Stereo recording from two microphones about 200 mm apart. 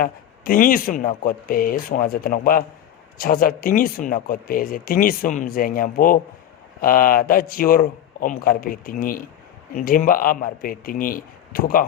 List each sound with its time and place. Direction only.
0.0 s speech: 45° left (ahead or behind)